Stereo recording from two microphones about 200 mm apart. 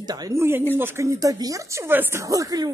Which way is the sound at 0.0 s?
20° right (ahead or behind).